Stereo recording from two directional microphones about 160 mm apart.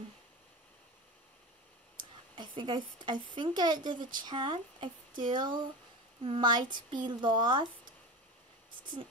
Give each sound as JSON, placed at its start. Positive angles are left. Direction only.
{"t": 2.0, "sound": "a woman's voice", "side_deg": -30}